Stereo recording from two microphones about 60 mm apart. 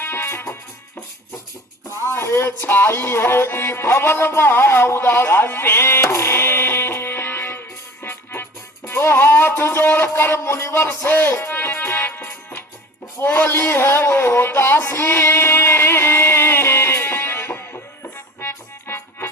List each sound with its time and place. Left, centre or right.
0.0 s music: left
2.0 s speech: left
2.6 s music: left
6.1 s music: left
13.1 s a sound: left
18.3 s music: left